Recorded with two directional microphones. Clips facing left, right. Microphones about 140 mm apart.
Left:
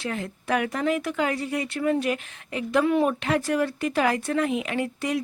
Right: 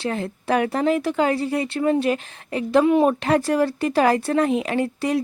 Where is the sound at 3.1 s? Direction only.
35° right (ahead or behind).